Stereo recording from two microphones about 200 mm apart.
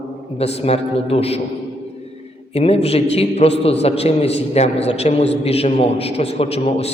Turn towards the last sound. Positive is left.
turn(degrees=30)  # may be behind; listen again after turning